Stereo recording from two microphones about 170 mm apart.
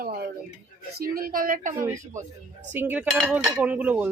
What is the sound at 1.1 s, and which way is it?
Speech, 55° right (ahead or behind).